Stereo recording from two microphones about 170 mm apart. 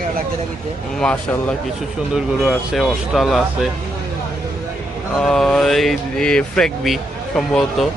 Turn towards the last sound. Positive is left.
turn(degrees=0)  # may be behind; listen again after turning